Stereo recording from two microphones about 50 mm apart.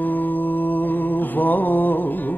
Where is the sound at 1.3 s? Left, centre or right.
Left.